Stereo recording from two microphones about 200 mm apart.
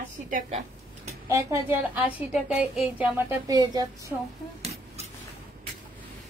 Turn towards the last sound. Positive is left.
turn(degrees=-35)  # may be behind; listen again after turning